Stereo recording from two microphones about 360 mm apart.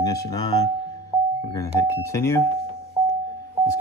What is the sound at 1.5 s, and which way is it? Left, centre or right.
Speech, centre.